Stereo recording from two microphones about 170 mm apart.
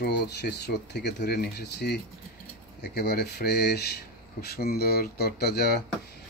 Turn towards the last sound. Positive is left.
turn(degrees=70)  # may be behind; listen again after turning